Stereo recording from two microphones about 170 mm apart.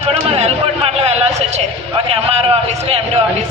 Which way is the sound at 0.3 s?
40° right (ahead or behind).